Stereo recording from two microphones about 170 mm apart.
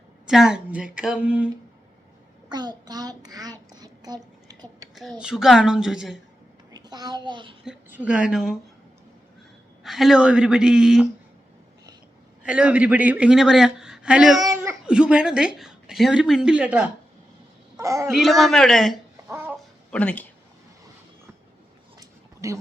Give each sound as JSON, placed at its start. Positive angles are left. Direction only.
{"t": 0.3, "sound": "a woman's voice", "side_deg": -5}
{"t": 2.5, "sound": "a child's voice", "side_deg": -25}
{"t": 5.2, "sound": "a woman's voice", "side_deg": 0}
{"t": 6.7, "sound": "a child's voice", "side_deg": -25}
{"t": 7.6, "sound": "a woman's voice", "side_deg": -5}
{"t": 9.8, "sound": "a woman's voice", "side_deg": 0}
{"t": 12.4, "sound": "a woman's voice", "side_deg": -5}
{"t": 14.4, "sound": "speech", "side_deg": -20}
{"t": 14.8, "sound": "a woman's voice", "side_deg": -5}
{"t": 17.7, "sound": "a child's voice", "side_deg": -20}
{"t": 18.1, "sound": "a woman's voice", "side_deg": 0}
{"t": 19.3, "sound": "a sound", "side_deg": -10}
{"t": 19.9, "sound": "speech", "side_deg": 5}
{"t": 22.4, "sound": "speech", "side_deg": -20}